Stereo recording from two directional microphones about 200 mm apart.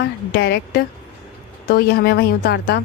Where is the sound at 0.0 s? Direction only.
55° left (ahead or behind).